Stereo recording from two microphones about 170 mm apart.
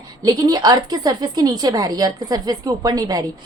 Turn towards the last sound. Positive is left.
turn(degrees=-20)  # may be behind; listen again after turning